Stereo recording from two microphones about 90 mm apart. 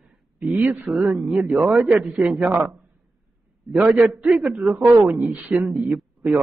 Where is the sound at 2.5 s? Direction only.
20° right (ahead or behind).